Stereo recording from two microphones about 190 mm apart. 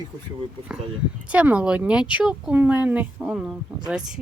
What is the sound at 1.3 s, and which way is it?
Speech, 5° right (ahead or behind).